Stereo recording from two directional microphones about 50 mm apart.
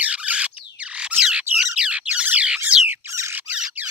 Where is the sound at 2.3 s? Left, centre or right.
Right.